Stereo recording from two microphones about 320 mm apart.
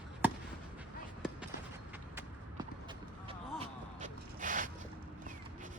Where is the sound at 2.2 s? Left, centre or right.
Centre.